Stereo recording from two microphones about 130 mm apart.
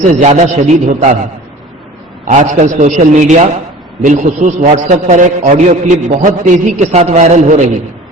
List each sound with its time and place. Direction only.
0.1 s a man's voice: 65° right (ahead or behind)
2.2 s a man's voice: 70° right (ahead or behind)
4.0 s a man's voice: 85° right; by 6.2 s 60° right (ahead or behind)
6.2 s a man's voice: 85° right
6.7 s a man's voice: 60° right (ahead or behind)